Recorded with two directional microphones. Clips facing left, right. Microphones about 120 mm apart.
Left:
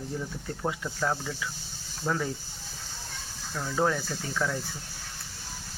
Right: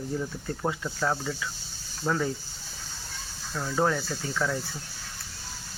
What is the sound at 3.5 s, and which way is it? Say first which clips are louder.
Speech: right 1 dB; 5° right (ahead or behind).